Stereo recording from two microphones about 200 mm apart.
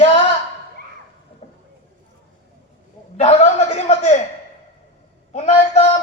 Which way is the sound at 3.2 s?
30° left (ahead or behind).